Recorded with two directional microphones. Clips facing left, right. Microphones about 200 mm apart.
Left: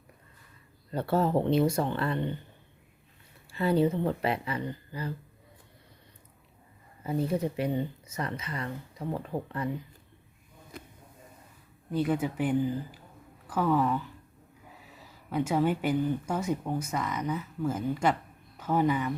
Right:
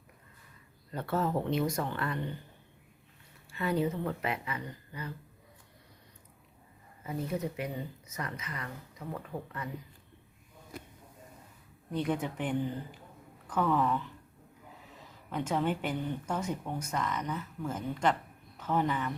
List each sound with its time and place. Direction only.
0.9 s speech: 30° left (ahead or behind)
3.5 s speech: 30° left (ahead or behind)
7.0 s speech: 30° left (ahead or behind)
11.9 s speech: 5° left (ahead or behind)